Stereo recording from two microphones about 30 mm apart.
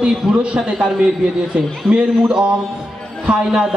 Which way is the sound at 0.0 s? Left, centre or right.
Right.